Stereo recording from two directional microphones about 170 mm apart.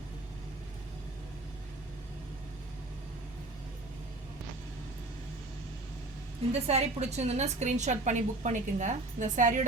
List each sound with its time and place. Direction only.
6.5 s a woman's voice: 40° right (ahead or behind)